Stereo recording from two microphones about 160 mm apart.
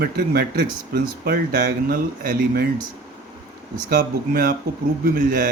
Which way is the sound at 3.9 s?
60° right (ahead or behind).